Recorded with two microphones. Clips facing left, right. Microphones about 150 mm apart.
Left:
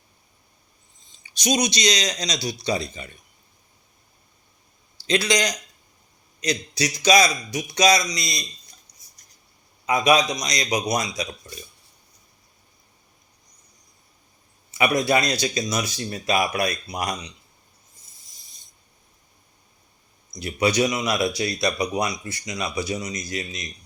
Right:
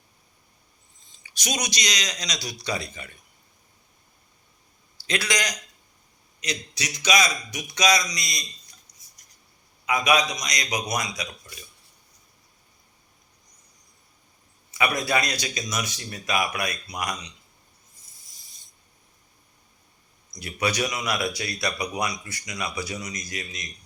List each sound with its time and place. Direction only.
1.2 s speech: 25° left (ahead or behind)
5.0 s speech: 25° left (ahead or behind)
6.4 s speech: 35° left (ahead or behind)
8.9 s cutlery: 15° left (ahead or behind)
9.8 s speech: 30° left (ahead or behind)
14.7 s speech: 25° left (ahead or behind)
20.3 s speech: 25° left (ahead or behind)